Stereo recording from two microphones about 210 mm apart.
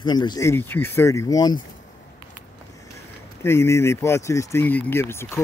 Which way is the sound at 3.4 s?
10° left (ahead or behind).